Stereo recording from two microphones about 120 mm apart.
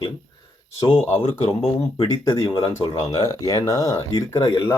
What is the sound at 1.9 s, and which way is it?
Speech, 35° left (ahead or behind).